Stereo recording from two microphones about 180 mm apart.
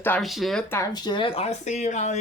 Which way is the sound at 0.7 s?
20° left (ahead or behind).